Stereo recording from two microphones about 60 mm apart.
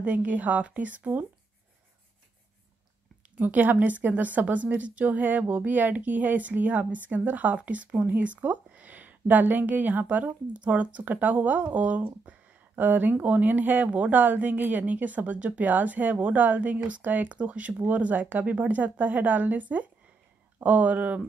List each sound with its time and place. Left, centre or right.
0.0 s a woman's voice: right
3.3 s a woman's voice: right